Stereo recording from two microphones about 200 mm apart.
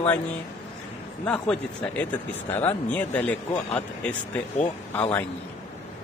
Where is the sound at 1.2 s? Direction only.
5° left (ahead or behind).